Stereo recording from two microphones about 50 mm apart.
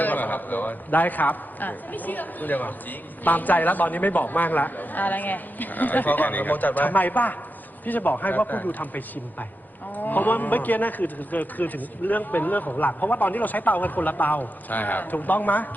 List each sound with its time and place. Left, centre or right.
0.0 s a man's voice: left